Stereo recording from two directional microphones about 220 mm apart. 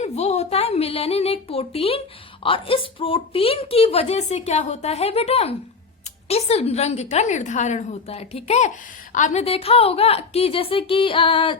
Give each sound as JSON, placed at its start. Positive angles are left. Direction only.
{"t": 0.0, "sound": "a woman's voice", "side_deg": 30}